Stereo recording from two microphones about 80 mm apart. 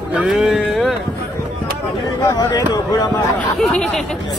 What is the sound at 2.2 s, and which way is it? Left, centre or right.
Speech, left.